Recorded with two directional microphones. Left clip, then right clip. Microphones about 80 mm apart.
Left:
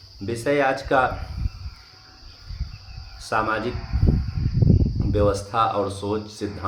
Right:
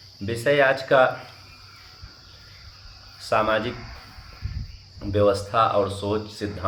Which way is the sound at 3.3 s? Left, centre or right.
Left.